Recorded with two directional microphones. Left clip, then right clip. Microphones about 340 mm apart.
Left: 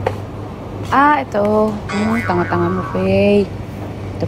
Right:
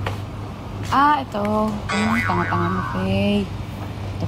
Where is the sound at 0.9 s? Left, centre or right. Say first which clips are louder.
Left 4 dB; right.